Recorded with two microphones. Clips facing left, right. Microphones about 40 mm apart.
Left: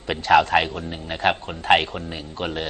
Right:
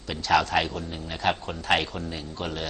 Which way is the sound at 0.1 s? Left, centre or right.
Left.